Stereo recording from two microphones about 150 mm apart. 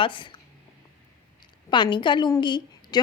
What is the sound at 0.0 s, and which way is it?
Speech, 35° left (ahead or behind).